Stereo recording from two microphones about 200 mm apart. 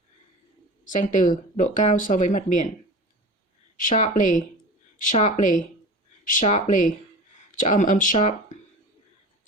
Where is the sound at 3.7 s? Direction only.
40° left (ahead or behind).